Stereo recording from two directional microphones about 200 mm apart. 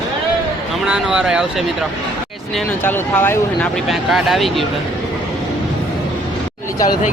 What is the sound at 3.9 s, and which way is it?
Speech, centre (ahead or behind).